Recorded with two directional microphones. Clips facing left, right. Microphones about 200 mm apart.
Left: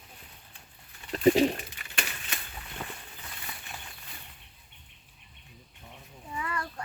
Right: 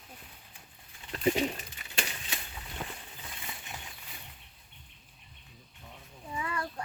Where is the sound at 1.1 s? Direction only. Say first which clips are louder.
Left 7 dB; 35° left (ahead or behind).